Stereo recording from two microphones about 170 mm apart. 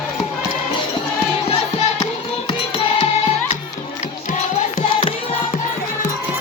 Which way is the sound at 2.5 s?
35° left (ahead or behind).